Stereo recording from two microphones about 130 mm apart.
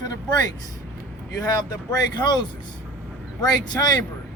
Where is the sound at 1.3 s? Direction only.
30° left (ahead or behind).